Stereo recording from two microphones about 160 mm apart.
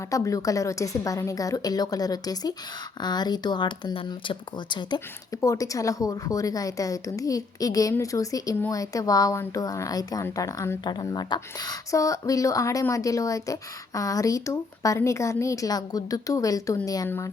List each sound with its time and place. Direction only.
0.1 s speech: 20° left (ahead or behind)
5.4 s speech: 20° left (ahead or behind)